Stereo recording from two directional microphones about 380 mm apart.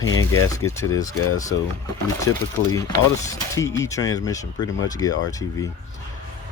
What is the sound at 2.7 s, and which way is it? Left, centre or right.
Speech, centre.